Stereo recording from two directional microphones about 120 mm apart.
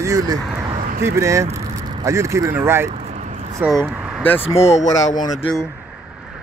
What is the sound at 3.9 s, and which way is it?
Vehicle, 10° right (ahead or behind).